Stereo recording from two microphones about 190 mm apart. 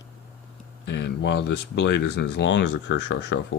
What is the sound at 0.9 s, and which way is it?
Speech, 65° left (ahead or behind).